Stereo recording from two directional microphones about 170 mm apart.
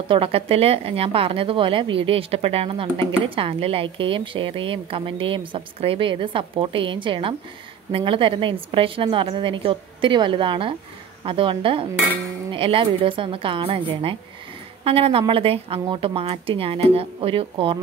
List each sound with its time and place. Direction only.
0.1 s speech: 35° right (ahead or behind)